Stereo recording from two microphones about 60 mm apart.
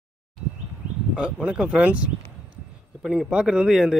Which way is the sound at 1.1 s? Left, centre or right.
Centre.